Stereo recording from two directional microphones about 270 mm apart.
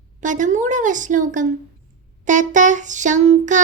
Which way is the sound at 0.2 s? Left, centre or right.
Right.